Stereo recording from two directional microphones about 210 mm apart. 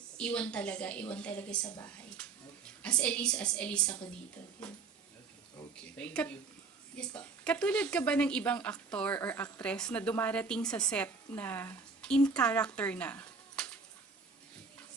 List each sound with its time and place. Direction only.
0.2 s a woman's voice: 5° left (ahead or behind)
2.6 s a woman's voice: 5° left (ahead or behind)
5.8 s a woman's voice: 5° left (ahead or behind)